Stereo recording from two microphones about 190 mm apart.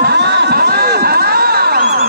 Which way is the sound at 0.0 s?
60° right (ahead or behind).